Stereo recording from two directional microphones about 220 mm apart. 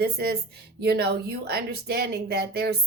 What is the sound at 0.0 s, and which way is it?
A woman's voice, 45° right (ahead or behind).